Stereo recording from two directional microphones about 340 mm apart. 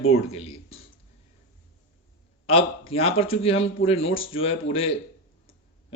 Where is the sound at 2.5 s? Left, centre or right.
Centre.